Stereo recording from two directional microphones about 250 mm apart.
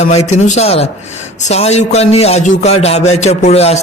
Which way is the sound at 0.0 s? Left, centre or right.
Left.